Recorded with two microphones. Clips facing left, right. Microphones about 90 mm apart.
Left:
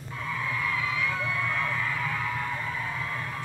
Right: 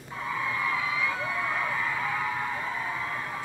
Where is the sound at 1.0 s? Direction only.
20° right (ahead or behind).